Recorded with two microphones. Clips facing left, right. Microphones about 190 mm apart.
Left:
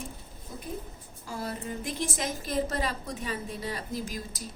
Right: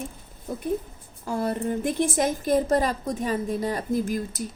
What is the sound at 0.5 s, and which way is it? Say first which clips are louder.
A woman's voice: right 11 dB; 60° right (ahead or behind).